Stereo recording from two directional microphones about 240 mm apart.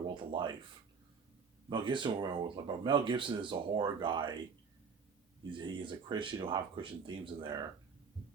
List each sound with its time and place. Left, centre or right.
0.1 s speech: centre
1.7 s speech: centre
5.5 s speech: centre